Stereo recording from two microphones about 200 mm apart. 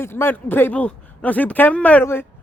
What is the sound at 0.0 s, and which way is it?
A man's voice, 10° left (ahead or behind).